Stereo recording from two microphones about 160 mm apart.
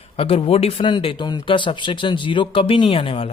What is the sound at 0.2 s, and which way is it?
Speech, 35° left (ahead or behind).